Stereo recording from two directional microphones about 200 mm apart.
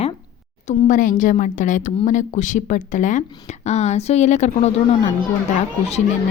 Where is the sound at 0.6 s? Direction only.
40° left (ahead or behind).